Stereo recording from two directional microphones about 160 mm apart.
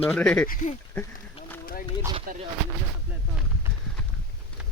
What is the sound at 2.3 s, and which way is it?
Speech, 60° right (ahead or behind).